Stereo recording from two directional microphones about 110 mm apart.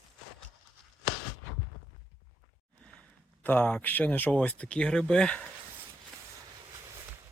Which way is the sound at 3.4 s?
15° left (ahead or behind).